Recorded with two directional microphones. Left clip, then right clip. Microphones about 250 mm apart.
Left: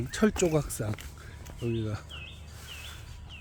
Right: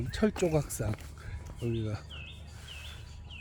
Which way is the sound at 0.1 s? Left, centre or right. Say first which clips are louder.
Left 3 dB; centre.